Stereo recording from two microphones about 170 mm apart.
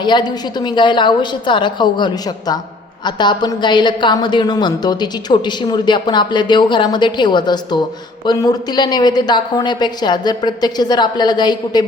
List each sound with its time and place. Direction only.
0.0 s a woman's voice: 25° left (ahead or behind)